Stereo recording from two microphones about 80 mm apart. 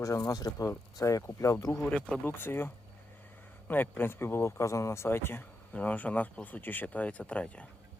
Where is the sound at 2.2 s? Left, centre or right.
Left.